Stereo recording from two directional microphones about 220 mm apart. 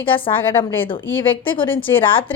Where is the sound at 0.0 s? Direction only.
25° left (ahead or behind).